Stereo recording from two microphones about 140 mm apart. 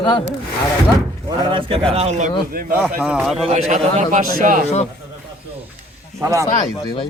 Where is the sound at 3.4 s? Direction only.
55° right (ahead or behind); by 4.6 s 80° right.